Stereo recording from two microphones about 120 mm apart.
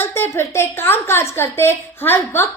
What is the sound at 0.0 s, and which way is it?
A woman's voice, 20° left (ahead or behind).